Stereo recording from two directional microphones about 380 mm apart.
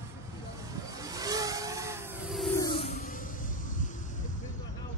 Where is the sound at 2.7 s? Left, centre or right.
Left.